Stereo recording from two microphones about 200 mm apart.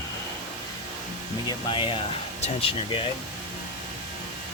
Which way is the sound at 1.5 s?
25° left (ahead or behind).